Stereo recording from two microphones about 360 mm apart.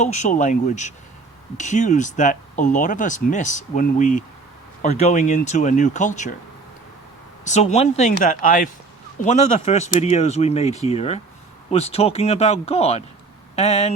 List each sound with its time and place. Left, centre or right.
0.0 s speech: centre
7.4 s speech: centre